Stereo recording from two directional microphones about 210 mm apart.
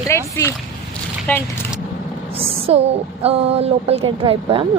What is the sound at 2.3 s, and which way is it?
Speech, 25° right (ahead or behind).